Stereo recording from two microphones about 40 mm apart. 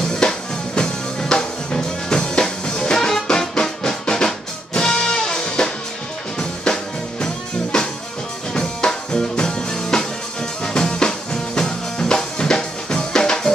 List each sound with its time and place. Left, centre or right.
0.1 s music: centre